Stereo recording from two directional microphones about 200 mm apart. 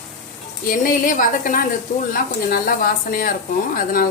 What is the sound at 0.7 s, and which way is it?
Speech, 45° left (ahead or behind).